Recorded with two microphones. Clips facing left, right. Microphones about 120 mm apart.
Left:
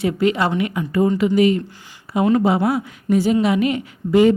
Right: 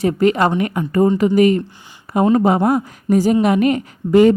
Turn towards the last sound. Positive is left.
turn(degrees=-45)  # may be behind; listen again after turning